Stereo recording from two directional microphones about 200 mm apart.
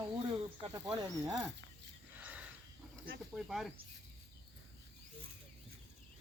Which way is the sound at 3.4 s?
Centre (ahead or behind).